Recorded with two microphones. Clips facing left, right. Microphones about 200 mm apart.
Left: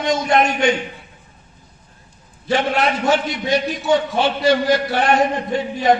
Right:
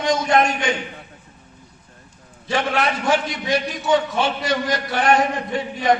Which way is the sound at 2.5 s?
25° left (ahead or behind).